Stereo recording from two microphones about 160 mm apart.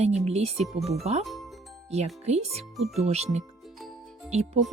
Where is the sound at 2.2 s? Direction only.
40° right (ahead or behind).